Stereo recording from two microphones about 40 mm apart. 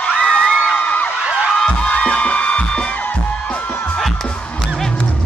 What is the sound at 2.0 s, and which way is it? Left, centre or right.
Music, left.